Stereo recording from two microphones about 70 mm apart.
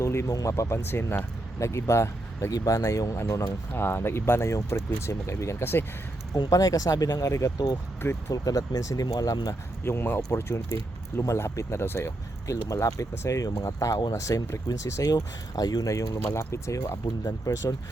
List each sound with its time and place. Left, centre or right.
0.0 s speech: left
0.9 s speech: left
1.5 s speech: left
2.5 s speech: left
3.8 s speech: left
6.3 s speech: left
9.8 s speech: left